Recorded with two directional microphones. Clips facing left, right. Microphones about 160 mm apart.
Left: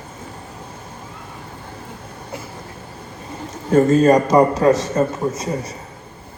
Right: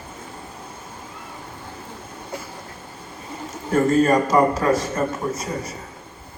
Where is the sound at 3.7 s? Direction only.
20° left (ahead or behind).